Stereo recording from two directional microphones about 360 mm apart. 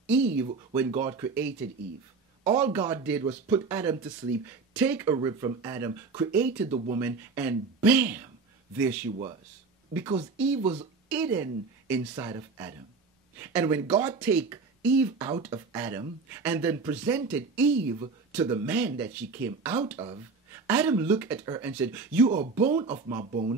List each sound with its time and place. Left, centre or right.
0.0 s speech: centre
11.1 s speech: centre
18.3 s speech: centre